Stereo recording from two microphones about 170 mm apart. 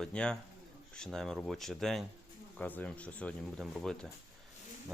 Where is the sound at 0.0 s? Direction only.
5° left (ahead or behind).